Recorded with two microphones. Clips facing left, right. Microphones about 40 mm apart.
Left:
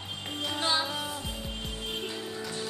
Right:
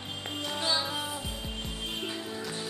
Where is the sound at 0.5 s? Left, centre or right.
Centre.